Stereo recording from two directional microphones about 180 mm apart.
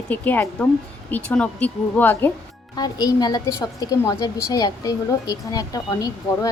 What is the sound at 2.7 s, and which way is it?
A woman's voice, 20° left (ahead or behind).